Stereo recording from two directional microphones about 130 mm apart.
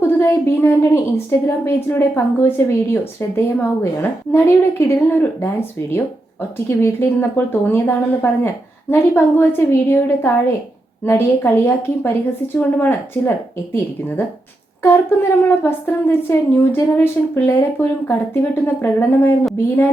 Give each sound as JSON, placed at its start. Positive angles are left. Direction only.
{"t": 0.0, "sound": "a woman's voice", "side_deg": 20}
{"t": 14.8, "sound": "a woman's voice", "side_deg": 20}